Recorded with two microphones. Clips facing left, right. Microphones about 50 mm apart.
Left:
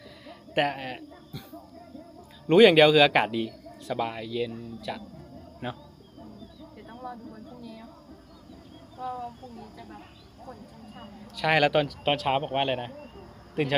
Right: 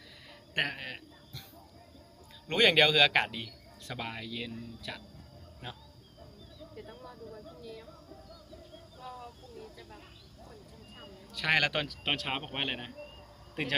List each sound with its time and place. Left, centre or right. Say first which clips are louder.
0.3 s a sound: left 7 dB; centre
2.5 s speech: left 9 dB; centre
5.6 s a man's voice: left 10 dB; left
6.7 s a sound: left 7 dB; centre
7.6 s speech: left 2 dB; centre
9.0 s speech: left 11 dB; left
11.3 s speech: left 7 dB; centre